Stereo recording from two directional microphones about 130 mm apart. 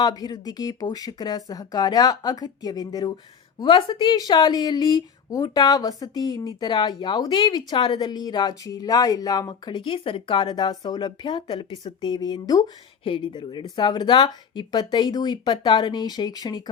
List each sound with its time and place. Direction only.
0.0 s speech: 30° left (ahead or behind)